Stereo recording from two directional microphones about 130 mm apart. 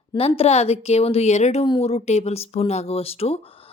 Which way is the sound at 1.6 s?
45° left (ahead or behind).